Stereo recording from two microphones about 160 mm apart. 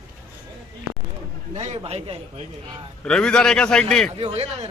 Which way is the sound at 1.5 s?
45° right (ahead or behind).